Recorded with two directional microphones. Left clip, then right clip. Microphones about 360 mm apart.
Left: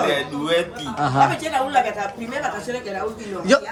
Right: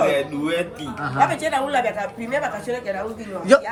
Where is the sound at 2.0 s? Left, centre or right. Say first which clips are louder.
Right 1 dB; right.